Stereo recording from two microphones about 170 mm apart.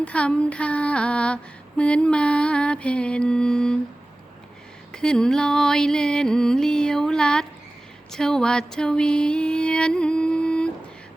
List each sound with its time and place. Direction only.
0.0 s female singing: 5° left (ahead or behind)
4.9 s music: 5° left (ahead or behind)